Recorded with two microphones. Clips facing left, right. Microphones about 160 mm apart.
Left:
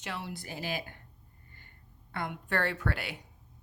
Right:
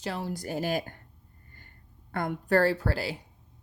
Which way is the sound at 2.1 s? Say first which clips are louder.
Right 8 dB; 45° right (ahead or behind).